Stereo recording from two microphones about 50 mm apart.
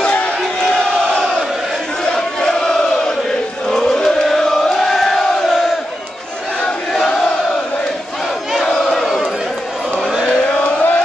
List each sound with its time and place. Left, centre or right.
0.4 s crowd: centre
2.1 s chant: centre
6.6 s chant: centre
8.6 s battle cry: centre
10.5 s chant: left